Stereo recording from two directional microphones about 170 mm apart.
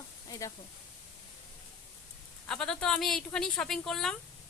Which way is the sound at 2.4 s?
5° left (ahead or behind).